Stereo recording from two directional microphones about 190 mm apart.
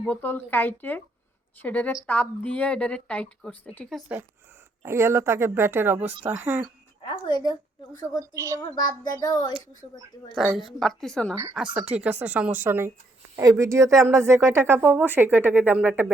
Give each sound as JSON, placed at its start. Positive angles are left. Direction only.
{"t": 0.0, "sound": "a woman's voice", "side_deg": 10}
{"t": 4.8, "sound": "speech", "side_deg": -15}
{"t": 8.2, "sound": "speech", "side_deg": -15}
{"t": 8.7, "sound": "speech", "side_deg": 20}
{"t": 10.3, "sound": "a woman's voice", "side_deg": -5}